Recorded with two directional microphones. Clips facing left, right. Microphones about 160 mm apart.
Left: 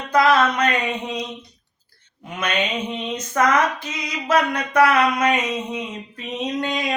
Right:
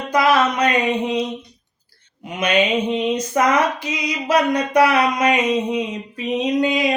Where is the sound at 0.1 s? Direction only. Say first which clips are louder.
Even; 10° right (ahead or behind).